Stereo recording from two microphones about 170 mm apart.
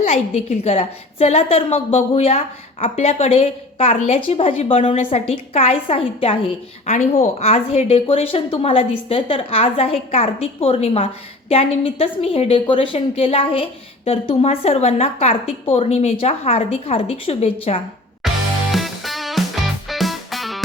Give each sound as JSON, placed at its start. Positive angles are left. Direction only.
{"t": 0.0, "sound": "speech", "side_deg": 40}
{"t": 18.2, "sound": "music", "side_deg": 0}